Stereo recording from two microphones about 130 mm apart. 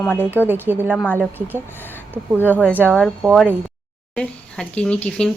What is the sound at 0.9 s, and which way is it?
Speech, 10° left (ahead or behind).